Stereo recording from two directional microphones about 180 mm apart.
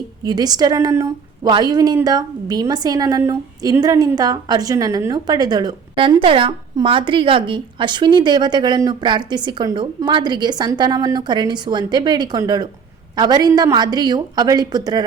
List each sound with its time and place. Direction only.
0.3 s a woman's voice: 20° right (ahead or behind)